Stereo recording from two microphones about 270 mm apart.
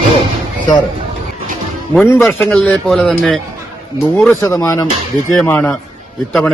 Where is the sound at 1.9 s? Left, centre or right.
Centre.